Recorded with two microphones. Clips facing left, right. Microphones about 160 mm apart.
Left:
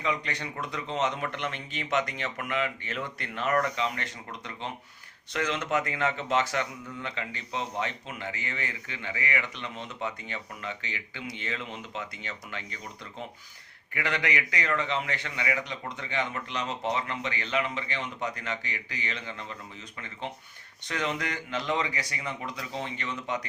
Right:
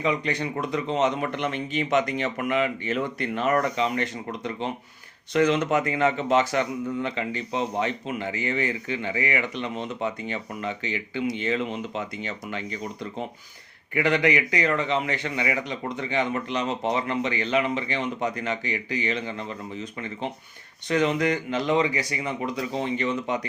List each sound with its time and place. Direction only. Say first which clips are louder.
0.0 s a man's voice: right 6 dB; 15° right (ahead or behind)
13.9 s a man's voice: right 9 dB; 20° right (ahead or behind)
20.8 s speech: right 9 dB; 20° right (ahead or behind)